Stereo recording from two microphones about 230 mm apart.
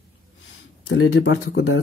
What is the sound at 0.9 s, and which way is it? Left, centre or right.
Speech, left.